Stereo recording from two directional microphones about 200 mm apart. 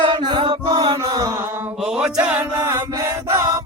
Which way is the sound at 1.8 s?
5° right (ahead or behind).